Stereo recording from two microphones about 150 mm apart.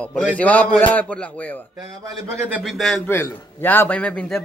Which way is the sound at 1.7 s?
25° right (ahead or behind).